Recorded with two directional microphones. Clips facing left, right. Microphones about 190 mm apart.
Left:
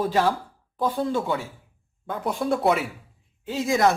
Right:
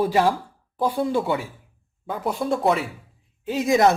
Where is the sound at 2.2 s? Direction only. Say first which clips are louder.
Right 1 dB; centre (ahead or behind).